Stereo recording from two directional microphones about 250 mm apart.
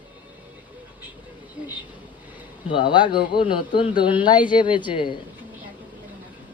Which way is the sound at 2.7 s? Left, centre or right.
Centre.